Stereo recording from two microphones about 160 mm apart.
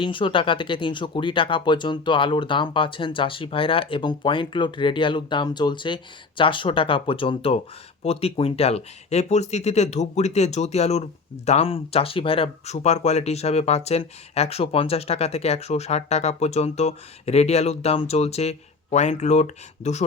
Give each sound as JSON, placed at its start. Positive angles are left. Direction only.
{"t": 0.0, "sound": "speech", "side_deg": 30}